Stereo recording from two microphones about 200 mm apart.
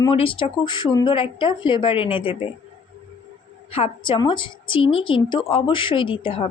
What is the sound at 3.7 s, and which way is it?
A woman's voice, 30° left (ahead or behind).